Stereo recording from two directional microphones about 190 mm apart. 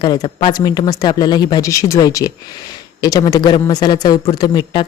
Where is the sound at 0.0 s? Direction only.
25° left (ahead or behind).